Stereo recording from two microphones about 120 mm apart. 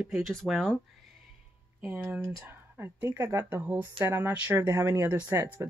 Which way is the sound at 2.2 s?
20° right (ahead or behind).